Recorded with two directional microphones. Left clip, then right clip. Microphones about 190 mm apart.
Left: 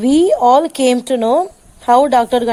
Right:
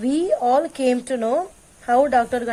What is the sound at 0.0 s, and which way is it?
Speech, 25° left (ahead or behind).